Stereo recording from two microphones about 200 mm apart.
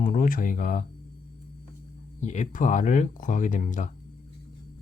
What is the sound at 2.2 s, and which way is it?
Speech, 35° left (ahead or behind).